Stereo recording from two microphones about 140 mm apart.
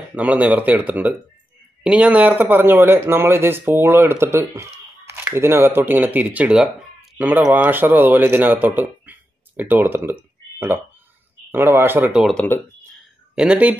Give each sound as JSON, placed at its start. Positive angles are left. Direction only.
{"t": 0.1, "sound": "speech", "side_deg": -10}
{"t": 11.5, "sound": "speech", "side_deg": -15}
{"t": 12.2, "sound": "speech", "side_deg": 0}